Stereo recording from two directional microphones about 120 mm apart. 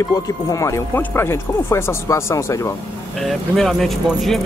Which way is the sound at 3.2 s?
Centre (ahead or behind).